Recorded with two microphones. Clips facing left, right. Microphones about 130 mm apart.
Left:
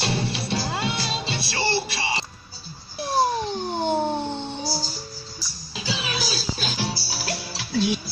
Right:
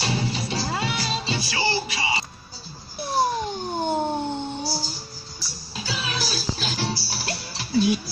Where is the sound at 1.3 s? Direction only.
70° left (ahead or behind).